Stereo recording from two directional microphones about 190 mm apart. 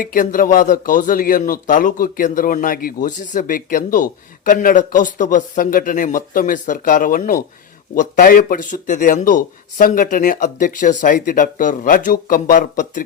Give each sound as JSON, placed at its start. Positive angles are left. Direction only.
{"t": 0.0, "sound": "speech", "side_deg": 45}